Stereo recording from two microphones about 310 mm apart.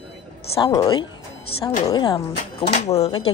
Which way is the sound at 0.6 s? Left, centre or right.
Centre.